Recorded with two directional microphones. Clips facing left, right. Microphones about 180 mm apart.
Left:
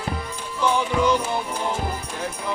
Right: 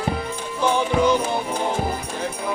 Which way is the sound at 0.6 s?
20° right (ahead or behind).